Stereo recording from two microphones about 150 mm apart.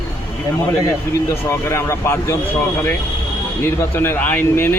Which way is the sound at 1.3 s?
15° left (ahead or behind).